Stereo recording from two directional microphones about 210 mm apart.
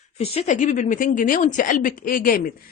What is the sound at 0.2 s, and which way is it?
A woman's voice, 30° left (ahead or behind).